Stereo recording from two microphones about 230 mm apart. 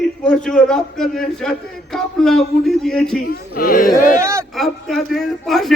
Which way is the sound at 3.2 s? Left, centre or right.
Left.